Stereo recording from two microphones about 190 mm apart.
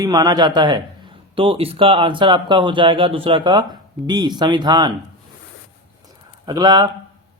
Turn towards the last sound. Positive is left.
turn(degrees=-20)  # may be behind; listen again after turning